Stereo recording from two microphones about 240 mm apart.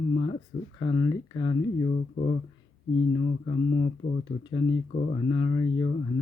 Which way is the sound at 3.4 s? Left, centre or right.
Left.